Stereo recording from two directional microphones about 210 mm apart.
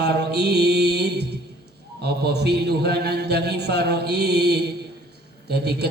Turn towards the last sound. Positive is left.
turn(degrees=-50)  # may be behind; listen again after turning